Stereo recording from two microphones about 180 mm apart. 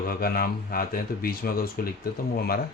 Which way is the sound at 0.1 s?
55° left (ahead or behind).